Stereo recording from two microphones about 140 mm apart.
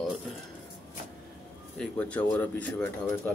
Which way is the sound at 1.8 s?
10° left (ahead or behind).